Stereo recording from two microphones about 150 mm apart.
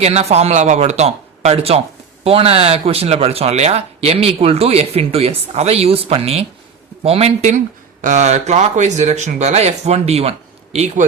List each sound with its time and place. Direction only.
0.0 s speech: 45° right (ahead or behind)